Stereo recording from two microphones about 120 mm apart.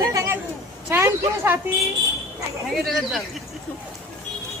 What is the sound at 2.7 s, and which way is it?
Speech, centre (ahead or behind).